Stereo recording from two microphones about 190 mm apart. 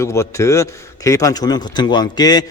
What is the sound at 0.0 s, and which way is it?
A man's voice, 15° left (ahead or behind).